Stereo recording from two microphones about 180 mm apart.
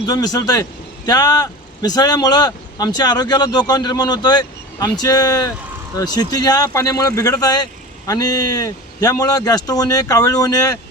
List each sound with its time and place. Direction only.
0.0 s speech: 20° left (ahead or behind)